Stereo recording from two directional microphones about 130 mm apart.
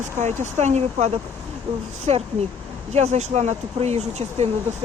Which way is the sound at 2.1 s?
55° right (ahead or behind).